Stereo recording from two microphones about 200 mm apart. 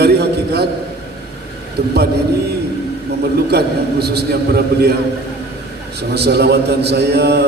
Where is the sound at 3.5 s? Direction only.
55° right (ahead or behind).